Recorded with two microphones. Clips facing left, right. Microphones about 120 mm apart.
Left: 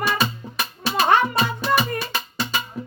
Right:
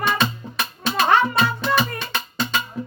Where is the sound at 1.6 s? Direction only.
5° left (ahead or behind).